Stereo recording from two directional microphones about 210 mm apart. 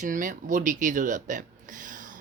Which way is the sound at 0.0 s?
40° right (ahead or behind).